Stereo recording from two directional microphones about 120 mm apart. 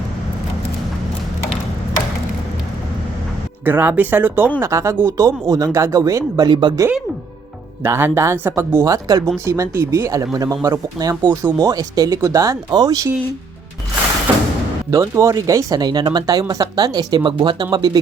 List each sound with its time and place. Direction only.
3.6 s speech: 15° right (ahead or behind); by 6.7 s 40° right (ahead or behind)
7.8 s speech: 20° right (ahead or behind)
14.8 s speech: 25° right (ahead or behind)